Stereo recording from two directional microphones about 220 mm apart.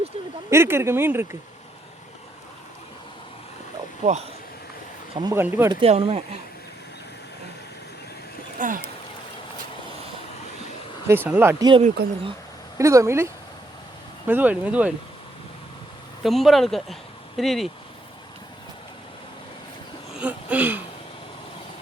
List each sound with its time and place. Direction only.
0.5 s speech: 10° right (ahead or behind)
4.0 s speech: 30° right (ahead or behind)
5.1 s speech: 15° right (ahead or behind)
5.8 s speech: 25° right (ahead or behind)
8.5 s speech: 35° right (ahead or behind)
11.1 s speech: 10° right (ahead or behind)
12.0 s speech: 45° right (ahead or behind)
12.8 s speech: 15° right (ahead or behind)
16.2 s speech: centre (ahead or behind)
20.1 s a sound: 5° right (ahead or behind)